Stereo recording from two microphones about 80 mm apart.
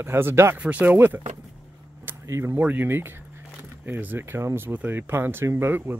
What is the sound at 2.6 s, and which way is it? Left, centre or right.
Speech, right.